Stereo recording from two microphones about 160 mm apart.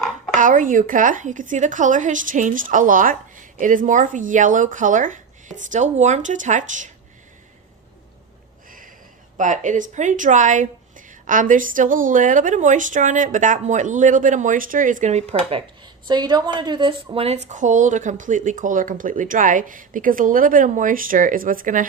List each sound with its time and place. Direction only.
0.3 s a woman's voice: 55° right (ahead or behind)
9.4 s a woman's voice: 50° right (ahead or behind)
16.0 s a woman's voice: 25° right (ahead or behind); by 21.8 s 60° right (ahead or behind)